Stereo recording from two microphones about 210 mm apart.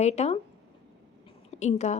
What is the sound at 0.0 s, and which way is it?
Speech, 30° left (ahead or behind).